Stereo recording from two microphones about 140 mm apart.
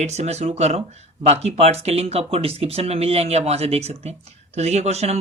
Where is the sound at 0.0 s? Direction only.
55° right (ahead or behind).